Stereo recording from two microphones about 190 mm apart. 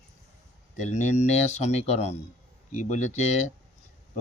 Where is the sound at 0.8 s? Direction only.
40° left (ahead or behind).